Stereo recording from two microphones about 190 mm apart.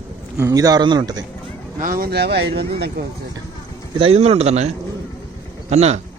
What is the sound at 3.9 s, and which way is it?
Speech, 30° right (ahead or behind).